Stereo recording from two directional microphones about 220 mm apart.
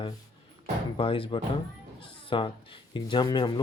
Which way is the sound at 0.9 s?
25° left (ahead or behind).